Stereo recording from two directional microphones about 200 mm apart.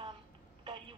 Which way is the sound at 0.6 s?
25° right (ahead or behind).